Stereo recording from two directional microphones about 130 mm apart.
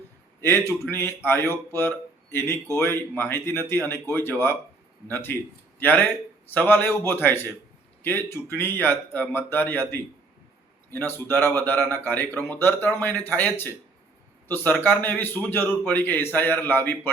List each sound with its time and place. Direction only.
0.7 s a man's voice: 20° left (ahead or behind)